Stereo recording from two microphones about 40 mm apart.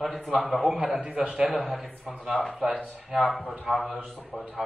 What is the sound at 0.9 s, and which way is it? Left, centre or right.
Speech, right.